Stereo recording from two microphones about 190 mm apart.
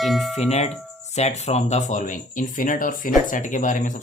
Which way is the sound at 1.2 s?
35° left (ahead or behind).